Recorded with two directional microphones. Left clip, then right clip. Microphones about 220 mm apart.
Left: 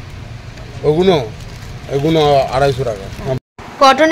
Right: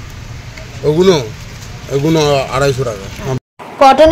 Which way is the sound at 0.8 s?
40° right (ahead or behind).